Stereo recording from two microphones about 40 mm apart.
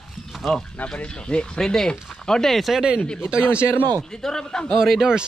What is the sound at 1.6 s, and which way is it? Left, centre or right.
Speech, centre.